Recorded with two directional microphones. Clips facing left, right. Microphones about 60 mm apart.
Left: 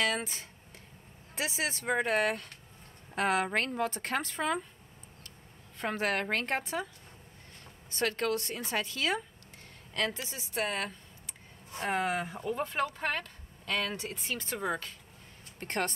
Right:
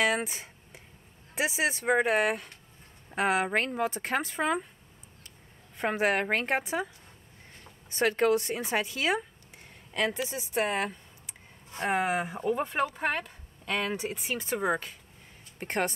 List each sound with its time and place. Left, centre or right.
0.0 s a sound: centre
1.3 s speech: centre
5.8 s speech: centre
7.9 s speech: centre